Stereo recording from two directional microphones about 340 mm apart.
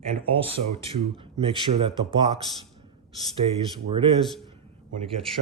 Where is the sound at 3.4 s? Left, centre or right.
Centre.